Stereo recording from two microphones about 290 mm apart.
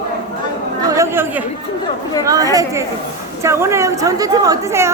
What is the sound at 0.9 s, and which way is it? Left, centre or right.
Speech, centre.